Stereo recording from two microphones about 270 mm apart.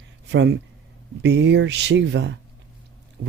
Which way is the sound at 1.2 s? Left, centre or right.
Right.